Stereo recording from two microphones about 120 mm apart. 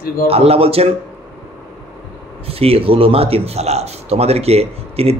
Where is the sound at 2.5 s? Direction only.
55° right (ahead or behind).